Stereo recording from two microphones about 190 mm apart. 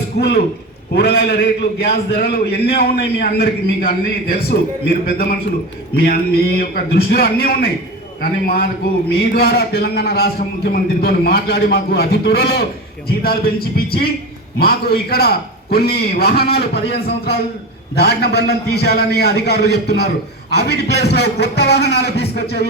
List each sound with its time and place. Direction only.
0.9 s a man's voice: 60° left (ahead or behind)